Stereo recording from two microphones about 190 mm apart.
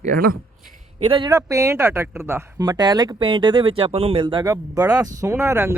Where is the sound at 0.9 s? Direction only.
30° right (ahead or behind).